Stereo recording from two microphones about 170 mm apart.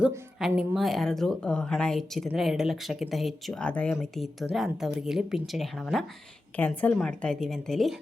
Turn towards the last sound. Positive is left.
turn(degrees=0)  # may be behind; listen again after turning